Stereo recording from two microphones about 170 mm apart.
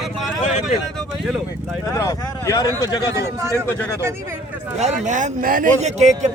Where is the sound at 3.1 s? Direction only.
15° right (ahead or behind).